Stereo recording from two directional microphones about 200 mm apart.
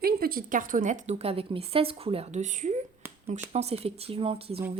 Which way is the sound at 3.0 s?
10° right (ahead or behind).